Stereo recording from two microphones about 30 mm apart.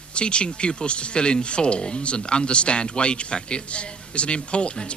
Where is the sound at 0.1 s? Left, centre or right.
Left.